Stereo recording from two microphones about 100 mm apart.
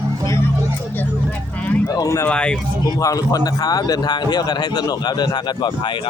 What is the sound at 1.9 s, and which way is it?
Speech, 30° left (ahead or behind).